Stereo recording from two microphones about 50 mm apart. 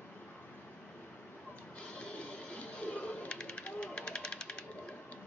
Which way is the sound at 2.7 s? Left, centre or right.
Left.